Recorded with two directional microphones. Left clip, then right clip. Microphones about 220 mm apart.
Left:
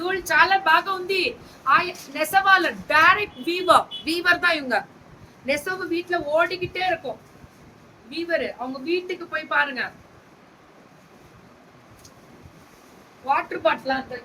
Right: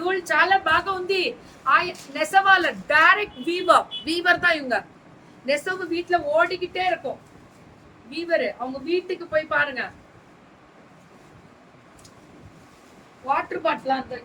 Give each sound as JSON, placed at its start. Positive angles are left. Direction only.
{"t": 0.0, "sound": "a woman's voice", "side_deg": 20}
{"t": 8.9, "sound": "a woman's voice", "side_deg": 15}
{"t": 13.2, "sound": "a woman's voice", "side_deg": 10}